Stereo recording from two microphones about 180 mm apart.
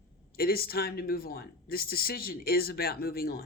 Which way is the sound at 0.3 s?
55° left (ahead or behind).